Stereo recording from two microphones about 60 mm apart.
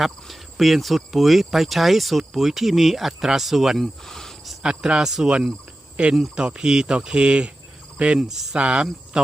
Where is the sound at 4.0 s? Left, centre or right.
Centre.